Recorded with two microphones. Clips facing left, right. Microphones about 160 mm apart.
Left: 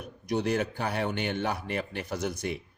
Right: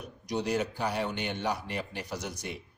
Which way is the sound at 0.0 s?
55° left (ahead or behind).